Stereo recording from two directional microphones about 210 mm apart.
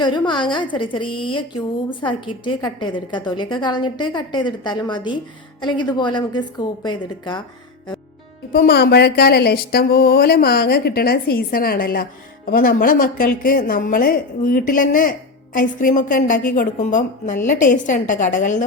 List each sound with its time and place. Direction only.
0.0 s a woman's voice: 20° left (ahead or behind)
8.5 s a woman's voice: 45° left (ahead or behind)